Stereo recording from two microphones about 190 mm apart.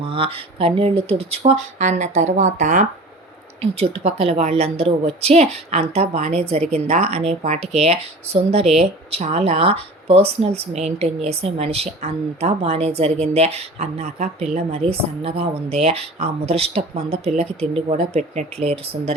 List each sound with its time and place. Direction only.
0.0 s a woman's voice: 30° right (ahead or behind)